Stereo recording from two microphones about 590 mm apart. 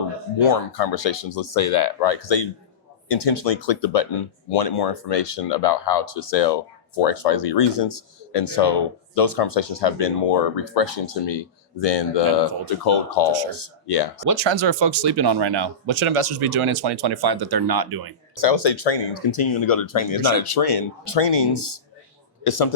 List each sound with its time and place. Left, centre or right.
0.3 s speech: left
14.3 s speech: right
18.3 s speech: left